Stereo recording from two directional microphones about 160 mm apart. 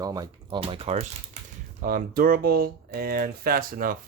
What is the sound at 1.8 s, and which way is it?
Speech, 60° right (ahead or behind).